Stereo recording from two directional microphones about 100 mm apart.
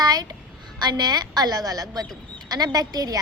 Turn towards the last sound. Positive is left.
turn(degrees=-40)  # may be behind; listen again after turning